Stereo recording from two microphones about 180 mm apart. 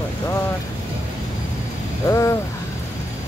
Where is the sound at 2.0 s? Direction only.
15° left (ahead or behind).